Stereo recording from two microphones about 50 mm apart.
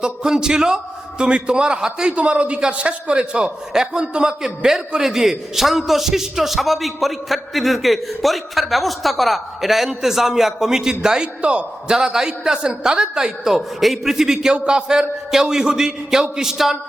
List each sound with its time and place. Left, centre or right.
0.0 s a man's voice: centre